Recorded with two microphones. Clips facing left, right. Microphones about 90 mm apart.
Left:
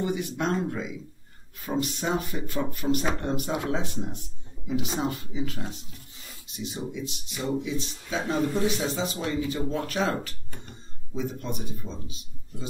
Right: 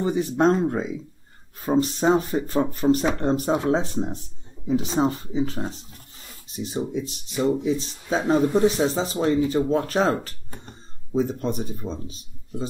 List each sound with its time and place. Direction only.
0.0 s speech: 35° right (ahead or behind)